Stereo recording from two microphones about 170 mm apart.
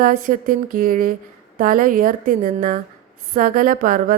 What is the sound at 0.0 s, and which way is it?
Speech, 55° right (ahead or behind).